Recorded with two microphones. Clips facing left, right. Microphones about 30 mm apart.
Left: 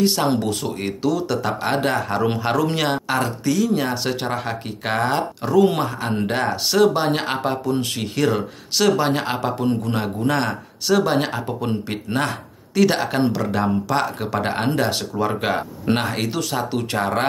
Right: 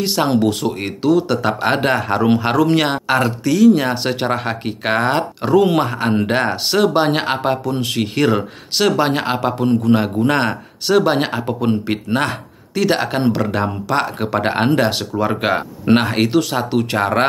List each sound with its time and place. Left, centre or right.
0.1 s speech: right
12.7 s speech: centre; by 17.2 s right